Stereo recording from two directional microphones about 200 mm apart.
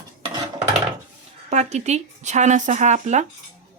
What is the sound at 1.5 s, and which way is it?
Speech, 35° right (ahead or behind).